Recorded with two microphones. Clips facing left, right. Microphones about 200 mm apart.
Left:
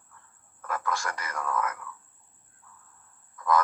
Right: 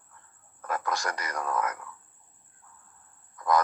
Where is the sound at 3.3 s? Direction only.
40° right (ahead or behind).